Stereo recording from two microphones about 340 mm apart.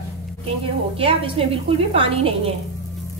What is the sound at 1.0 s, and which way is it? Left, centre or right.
A woman's voice, centre.